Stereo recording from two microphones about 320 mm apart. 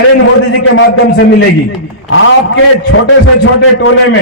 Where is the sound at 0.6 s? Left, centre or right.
Left.